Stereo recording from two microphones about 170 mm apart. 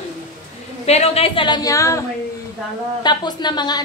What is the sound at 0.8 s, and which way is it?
A woman's voice, 40° left (ahead or behind).